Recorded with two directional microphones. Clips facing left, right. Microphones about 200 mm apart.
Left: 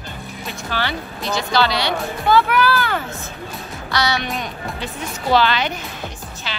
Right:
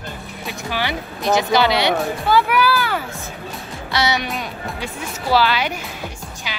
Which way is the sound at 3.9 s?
25° right (ahead or behind).